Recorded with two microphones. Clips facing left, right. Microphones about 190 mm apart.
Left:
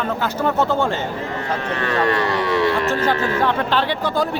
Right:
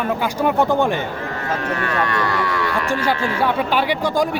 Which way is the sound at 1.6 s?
25° left (ahead or behind).